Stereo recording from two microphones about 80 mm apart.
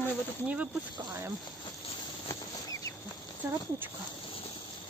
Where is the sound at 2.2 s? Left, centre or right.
Left.